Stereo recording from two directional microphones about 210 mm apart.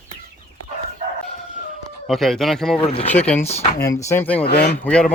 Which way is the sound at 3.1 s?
10° left (ahead or behind).